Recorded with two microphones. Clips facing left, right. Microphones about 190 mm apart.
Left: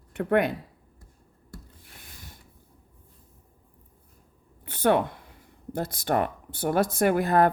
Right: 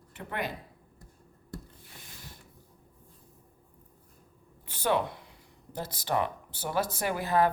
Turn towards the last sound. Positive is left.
turn(degrees=55)  # may be behind; listen again after turning